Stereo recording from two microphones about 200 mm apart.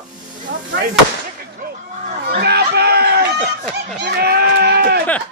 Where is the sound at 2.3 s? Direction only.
55° right (ahead or behind).